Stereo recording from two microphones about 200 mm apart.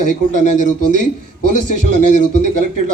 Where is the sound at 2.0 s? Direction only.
40° left (ahead or behind).